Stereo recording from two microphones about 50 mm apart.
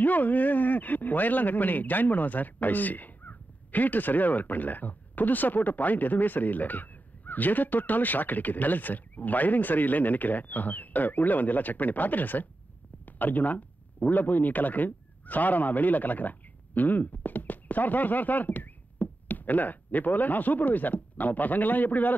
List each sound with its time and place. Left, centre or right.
0.0 s speech: left